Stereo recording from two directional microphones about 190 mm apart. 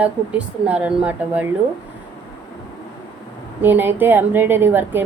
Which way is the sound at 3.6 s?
10° right (ahead or behind).